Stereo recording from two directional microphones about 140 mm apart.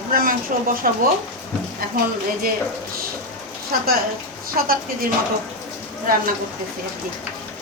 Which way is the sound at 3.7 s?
90° right.